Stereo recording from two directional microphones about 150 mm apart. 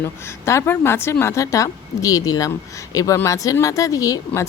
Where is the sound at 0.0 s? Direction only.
15° left (ahead or behind).